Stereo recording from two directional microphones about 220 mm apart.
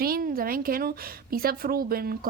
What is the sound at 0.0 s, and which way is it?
A woman's voice, 40° right (ahead or behind).